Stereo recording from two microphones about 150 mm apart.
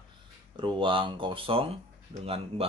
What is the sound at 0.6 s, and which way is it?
Speech, 35° right (ahead or behind).